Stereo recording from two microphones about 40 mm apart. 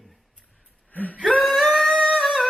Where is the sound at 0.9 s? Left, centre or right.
Left.